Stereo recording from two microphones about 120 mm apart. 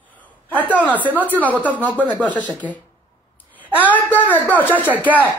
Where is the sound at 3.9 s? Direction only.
15° left (ahead or behind).